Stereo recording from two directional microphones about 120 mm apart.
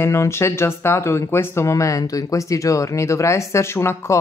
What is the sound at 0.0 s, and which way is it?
Speech, 20° left (ahead or behind).